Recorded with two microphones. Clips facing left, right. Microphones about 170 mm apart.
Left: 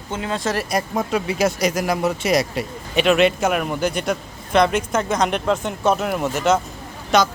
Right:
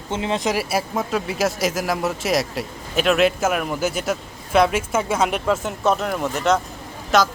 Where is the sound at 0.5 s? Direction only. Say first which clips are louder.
Even; 5° right (ahead or behind).